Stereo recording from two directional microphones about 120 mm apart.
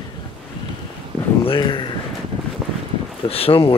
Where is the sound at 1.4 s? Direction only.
45° left (ahead or behind).